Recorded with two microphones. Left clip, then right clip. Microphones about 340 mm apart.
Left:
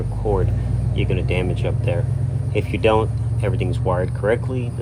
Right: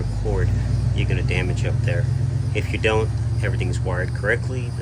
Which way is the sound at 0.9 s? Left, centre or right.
Centre.